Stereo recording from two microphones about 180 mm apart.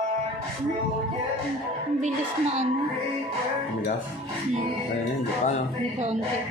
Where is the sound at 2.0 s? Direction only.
40° right (ahead or behind).